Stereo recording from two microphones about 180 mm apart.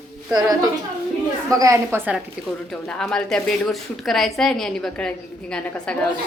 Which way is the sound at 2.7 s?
5° left (ahead or behind).